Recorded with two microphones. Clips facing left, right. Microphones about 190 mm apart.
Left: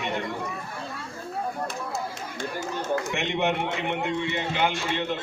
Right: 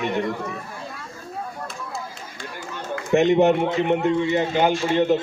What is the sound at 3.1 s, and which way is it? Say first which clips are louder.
A man's voice: right 10 dB; 40° right (ahead or behind).